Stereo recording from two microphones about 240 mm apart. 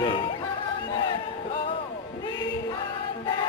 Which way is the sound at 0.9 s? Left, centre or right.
Centre.